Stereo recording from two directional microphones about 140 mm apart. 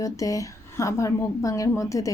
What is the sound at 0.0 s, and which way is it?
Speech, 25° left (ahead or behind).